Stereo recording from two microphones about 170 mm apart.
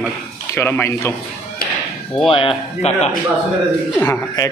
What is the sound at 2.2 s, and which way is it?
Speech, 30° left (ahead or behind).